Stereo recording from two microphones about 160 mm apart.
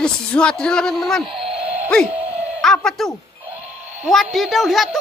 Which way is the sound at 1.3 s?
Centre (ahead or behind).